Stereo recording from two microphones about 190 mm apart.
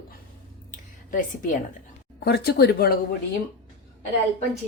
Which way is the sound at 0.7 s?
45° left (ahead or behind).